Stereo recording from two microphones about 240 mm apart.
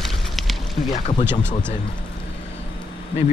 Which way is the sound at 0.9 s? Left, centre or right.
Left.